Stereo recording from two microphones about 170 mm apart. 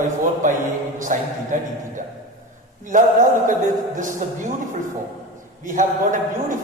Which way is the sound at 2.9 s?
50° right (ahead or behind).